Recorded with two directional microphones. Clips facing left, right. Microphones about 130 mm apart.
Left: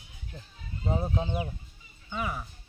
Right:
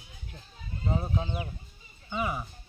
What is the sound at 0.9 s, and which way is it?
Speech, 20° left (ahead or behind).